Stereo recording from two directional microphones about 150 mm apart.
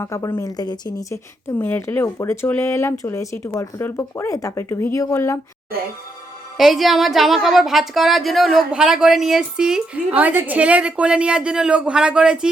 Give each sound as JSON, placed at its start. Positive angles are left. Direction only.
{"t": 0.0, "sound": "speech", "side_deg": 20}
{"t": 6.6, "sound": "a woman's voice", "side_deg": 0}